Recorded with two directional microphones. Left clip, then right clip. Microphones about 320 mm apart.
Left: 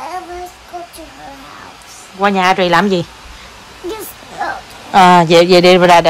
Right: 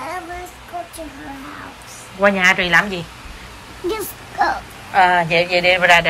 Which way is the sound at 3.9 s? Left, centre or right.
Centre.